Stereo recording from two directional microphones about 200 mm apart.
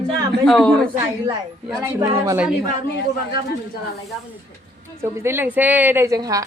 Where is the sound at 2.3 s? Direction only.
5° right (ahead or behind).